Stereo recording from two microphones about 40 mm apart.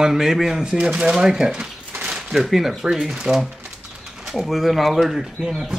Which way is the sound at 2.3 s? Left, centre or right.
Centre.